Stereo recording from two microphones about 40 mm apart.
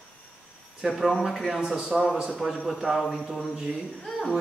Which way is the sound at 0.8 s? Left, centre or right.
Centre.